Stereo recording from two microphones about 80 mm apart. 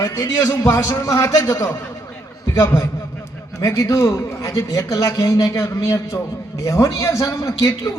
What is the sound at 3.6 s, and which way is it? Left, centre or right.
A man's voice, left.